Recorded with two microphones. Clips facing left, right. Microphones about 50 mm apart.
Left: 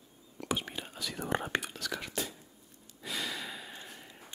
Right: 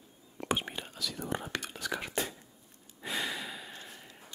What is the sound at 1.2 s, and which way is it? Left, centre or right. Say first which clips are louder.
Whispering: left 4 dB; left.